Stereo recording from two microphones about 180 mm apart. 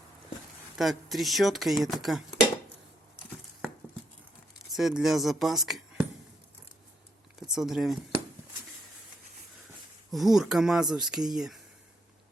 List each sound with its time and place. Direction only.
0.8 s speech: centre (ahead or behind)
4.7 s speech: centre (ahead or behind)
7.3 s speech: 5° right (ahead or behind)
10.1 s speech: centre (ahead or behind)